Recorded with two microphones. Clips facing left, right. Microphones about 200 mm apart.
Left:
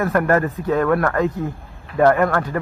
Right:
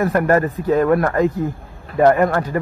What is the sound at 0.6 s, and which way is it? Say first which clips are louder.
Speech: right 3 dB; centre (ahead or behind).